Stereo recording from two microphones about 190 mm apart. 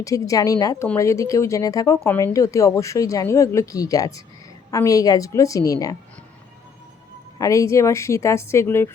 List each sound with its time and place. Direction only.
0.0 s speech: 15° left (ahead or behind)
7.3 s speech: 15° left (ahead or behind)